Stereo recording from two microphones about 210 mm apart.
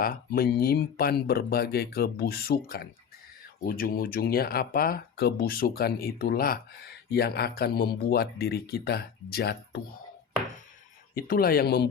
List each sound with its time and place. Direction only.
0.0 s speech: 45° left (ahead or behind)
11.1 s speech: 45° left (ahead or behind)